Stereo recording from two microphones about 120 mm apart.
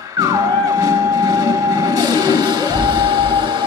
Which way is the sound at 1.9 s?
35° right (ahead or behind).